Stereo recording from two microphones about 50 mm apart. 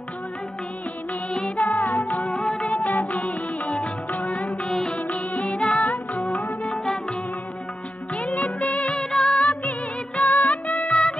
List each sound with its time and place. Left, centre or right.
1.6 s music: left
2.4 s music: centre
2.8 s music: left
4.5 s music: centre
4.9 s music: left
6.8 s music: centre
8.3 s music: left
9.4 s music: left
10.9 s music: centre